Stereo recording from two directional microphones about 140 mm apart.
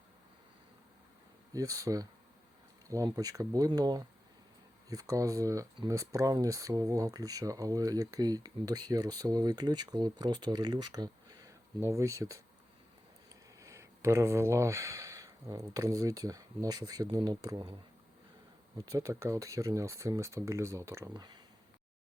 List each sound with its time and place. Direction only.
1.5 s speech: 25° right (ahead or behind)
13.6 s speech: 20° right (ahead or behind)
18.9 s speech: 25° right (ahead or behind)
21.1 s speech: 30° right (ahead or behind)